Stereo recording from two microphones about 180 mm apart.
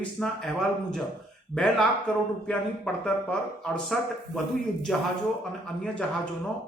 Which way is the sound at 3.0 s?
5° left (ahead or behind).